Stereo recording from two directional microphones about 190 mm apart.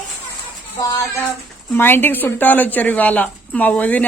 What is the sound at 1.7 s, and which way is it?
A woman's voice, 10° left (ahead or behind).